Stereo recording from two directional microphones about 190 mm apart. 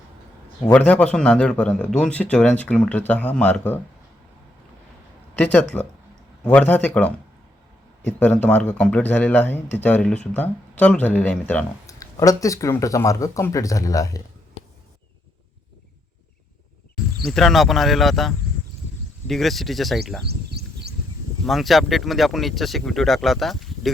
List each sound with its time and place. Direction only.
0.6 s a man's voice: 10° left (ahead or behind)
5.4 s a man's voice: 10° left (ahead or behind)
11.9 s a man's voice: 15° left (ahead or behind)
17.2 s speech: centre (ahead or behind)
21.4 s speech: centre (ahead or behind)